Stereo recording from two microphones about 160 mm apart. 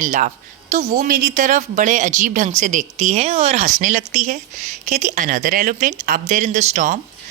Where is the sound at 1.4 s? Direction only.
50° right (ahead or behind).